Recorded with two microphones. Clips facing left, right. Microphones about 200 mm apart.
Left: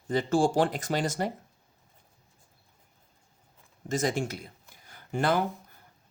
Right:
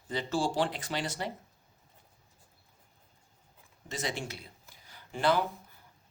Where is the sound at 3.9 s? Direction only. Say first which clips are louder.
Left 8 dB; 45° left (ahead or behind).